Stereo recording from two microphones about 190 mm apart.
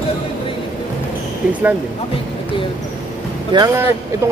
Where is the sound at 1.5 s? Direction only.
10° right (ahead or behind).